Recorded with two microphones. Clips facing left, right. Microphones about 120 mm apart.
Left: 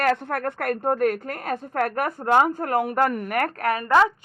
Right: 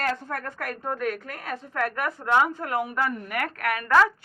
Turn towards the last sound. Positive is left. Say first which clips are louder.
# left 4 dB
turn(degrees=30)  # may be behind; listen again after turning